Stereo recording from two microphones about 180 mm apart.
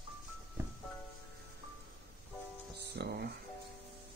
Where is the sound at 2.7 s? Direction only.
65° right (ahead or behind).